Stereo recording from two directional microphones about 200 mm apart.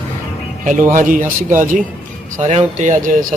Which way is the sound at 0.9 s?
40° right (ahead or behind).